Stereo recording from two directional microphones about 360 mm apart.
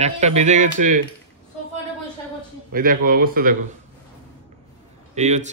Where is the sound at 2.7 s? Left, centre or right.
Right.